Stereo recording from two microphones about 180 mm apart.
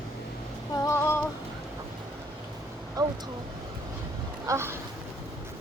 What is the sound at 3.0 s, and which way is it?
Speech, 20° right (ahead or behind).